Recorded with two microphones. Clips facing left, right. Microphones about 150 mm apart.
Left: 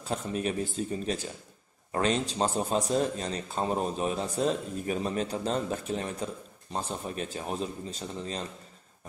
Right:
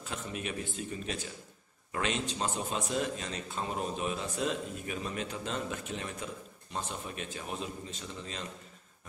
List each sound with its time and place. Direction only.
0.0 s a man's voice: 35° left (ahead or behind)